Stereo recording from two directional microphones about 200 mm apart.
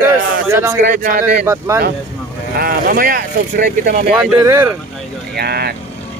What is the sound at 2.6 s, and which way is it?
Speech, 45° right (ahead or behind).